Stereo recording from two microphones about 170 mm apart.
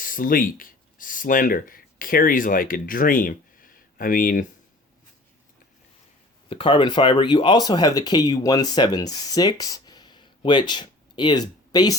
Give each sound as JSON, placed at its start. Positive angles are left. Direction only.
{"t": 0.0, "sound": "speech", "side_deg": 55}
{"t": 6.5, "sound": "speech", "side_deg": 30}